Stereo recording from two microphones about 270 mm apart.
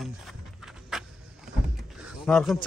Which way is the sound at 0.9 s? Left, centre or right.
Centre.